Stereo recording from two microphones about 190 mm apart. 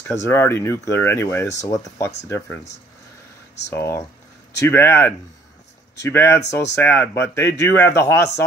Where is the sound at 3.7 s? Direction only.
15° left (ahead or behind).